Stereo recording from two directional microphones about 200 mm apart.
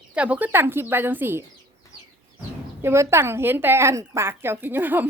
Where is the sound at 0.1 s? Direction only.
5° right (ahead or behind).